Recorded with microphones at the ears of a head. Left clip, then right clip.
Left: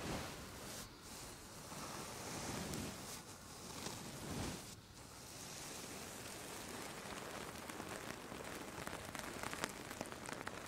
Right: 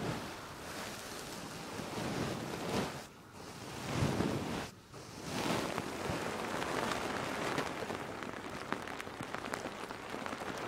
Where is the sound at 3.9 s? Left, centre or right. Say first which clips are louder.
Right 14 dB; right.